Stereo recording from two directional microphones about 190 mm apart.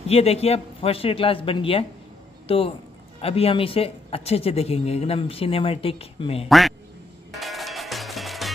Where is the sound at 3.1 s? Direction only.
30° left (ahead or behind).